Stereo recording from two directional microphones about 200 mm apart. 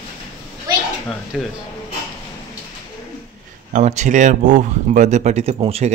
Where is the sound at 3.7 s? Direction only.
35° right (ahead or behind).